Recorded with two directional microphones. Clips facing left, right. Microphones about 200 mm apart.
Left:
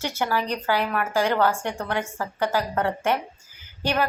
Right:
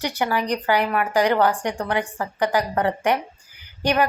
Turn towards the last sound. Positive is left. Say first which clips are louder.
# right 4 dB
turn(degrees=-15)  # may be behind; listen again after turning